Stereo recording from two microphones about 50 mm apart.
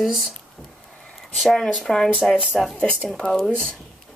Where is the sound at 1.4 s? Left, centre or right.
Centre.